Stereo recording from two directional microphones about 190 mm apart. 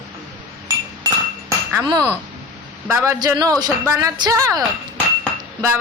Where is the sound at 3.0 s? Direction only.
20° right (ahead or behind).